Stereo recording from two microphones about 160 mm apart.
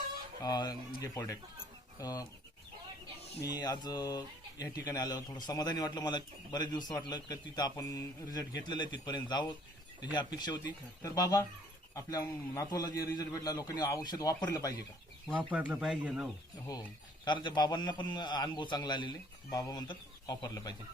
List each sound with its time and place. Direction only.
0.4 s a man's voice: 25° left (ahead or behind)
3.5 s a man's voice: 25° left (ahead or behind)
15.4 s speech: 10° right (ahead or behind)
17.2 s a man's voice: 30° left (ahead or behind)